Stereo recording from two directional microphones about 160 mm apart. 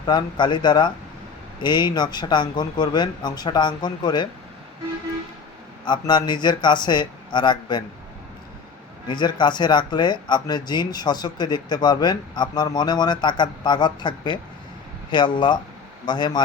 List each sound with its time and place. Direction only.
0.0 s speech: 30° left (ahead or behind)
5.8 s speech: 30° left (ahead or behind)
9.0 s speech: 30° left (ahead or behind)